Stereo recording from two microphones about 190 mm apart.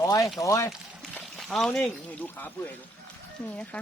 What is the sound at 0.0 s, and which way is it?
Speech, 15° left (ahead or behind).